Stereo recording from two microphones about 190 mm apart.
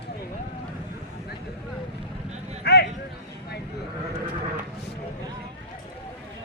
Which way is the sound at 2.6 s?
60° left (ahead or behind).